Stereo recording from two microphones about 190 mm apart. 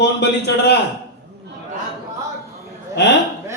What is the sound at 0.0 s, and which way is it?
Speech, 65° left (ahead or behind).